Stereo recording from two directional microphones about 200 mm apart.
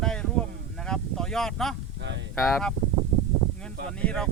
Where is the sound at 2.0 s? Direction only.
60° right (ahead or behind).